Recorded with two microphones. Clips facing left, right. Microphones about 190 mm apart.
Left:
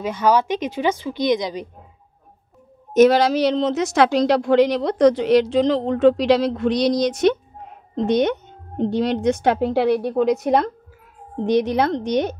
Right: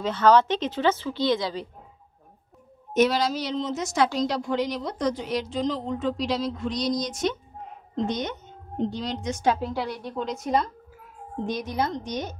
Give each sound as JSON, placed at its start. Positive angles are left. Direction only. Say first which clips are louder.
{"t": 0.0, "sound": "a woman's voice", "louder": "left 1 dB", "side_deg": 10}
{"t": 2.9, "sound": "a woman's voice", "louder": "left 8 dB", "side_deg": 45}
{"t": 3.2, "sound": "a woman's voice", "louder": "left 9 dB", "side_deg": 70}